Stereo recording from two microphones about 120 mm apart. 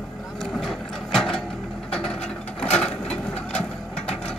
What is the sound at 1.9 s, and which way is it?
Ratchet, 5° left (ahead or behind).